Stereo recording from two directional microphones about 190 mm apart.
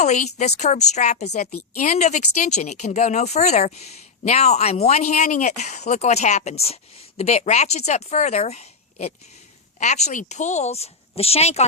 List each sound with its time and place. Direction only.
0.0 s speech: 40° left (ahead or behind)